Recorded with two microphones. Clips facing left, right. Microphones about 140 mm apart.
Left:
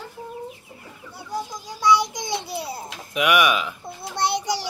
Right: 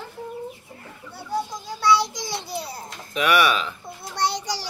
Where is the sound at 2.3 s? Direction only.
20° left (ahead or behind).